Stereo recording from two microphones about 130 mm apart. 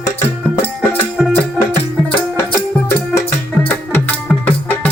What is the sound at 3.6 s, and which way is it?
Music, 15° left (ahead or behind).